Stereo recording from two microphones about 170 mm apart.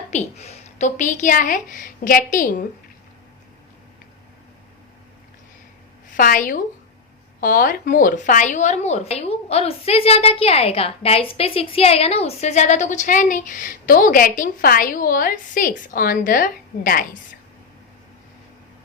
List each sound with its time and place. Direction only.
0.1 s a woman's voice: 40° left (ahead or behind)
6.1 s a woman's voice: 55° left (ahead or behind)